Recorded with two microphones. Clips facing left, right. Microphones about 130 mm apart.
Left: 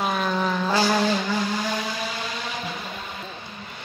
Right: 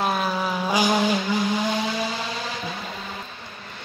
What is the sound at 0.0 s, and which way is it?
Vehicle, 5° right (ahead or behind).